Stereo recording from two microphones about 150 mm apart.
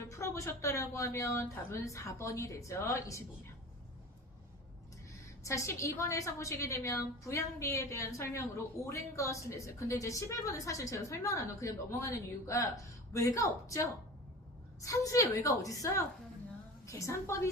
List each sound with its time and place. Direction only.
0.0 s a woman's voice: 20° left (ahead or behind)
5.4 s a woman's voice: 20° left (ahead or behind)